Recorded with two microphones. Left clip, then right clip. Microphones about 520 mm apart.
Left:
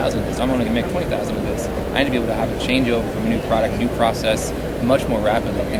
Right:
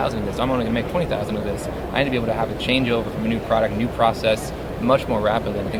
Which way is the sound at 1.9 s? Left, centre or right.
Right.